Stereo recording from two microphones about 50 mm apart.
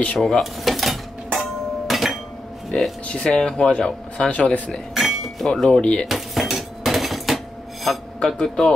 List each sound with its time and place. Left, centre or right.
0.2 s a sound: centre
2.7 s speech: left
4.3 s speech: left
4.9 s a sound: centre
5.7 s speech: left
6.0 s dishes: centre
8.3 s speech: centre